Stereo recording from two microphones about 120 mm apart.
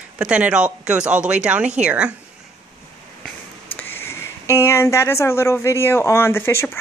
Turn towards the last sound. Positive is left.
turn(degrees=20)  # may be behind; listen again after turning